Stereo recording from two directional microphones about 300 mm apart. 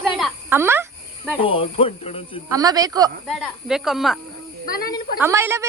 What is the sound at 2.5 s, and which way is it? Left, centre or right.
Speech, centre.